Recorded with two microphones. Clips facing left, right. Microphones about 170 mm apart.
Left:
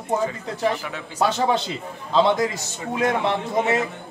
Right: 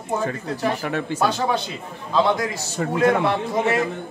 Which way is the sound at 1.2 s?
20° left (ahead or behind).